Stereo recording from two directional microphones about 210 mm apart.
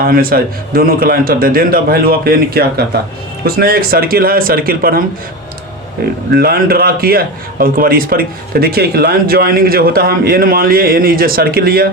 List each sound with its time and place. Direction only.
0.0 s a man's voice: 45° right (ahead or behind)
6.3 s a man's voice: 45° right (ahead or behind)